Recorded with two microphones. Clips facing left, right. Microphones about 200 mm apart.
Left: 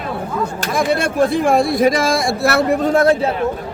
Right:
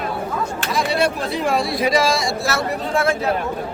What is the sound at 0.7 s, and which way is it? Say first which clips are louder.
Speech: left 5 dB; 50° left (ahead or behind).